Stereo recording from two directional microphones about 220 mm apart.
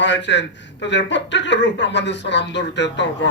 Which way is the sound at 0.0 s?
55° left (ahead or behind).